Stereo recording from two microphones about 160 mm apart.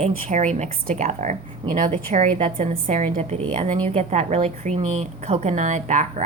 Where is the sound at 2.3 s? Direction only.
40° right (ahead or behind).